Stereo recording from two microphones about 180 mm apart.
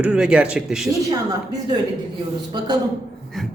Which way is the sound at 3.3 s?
Centre (ahead or behind).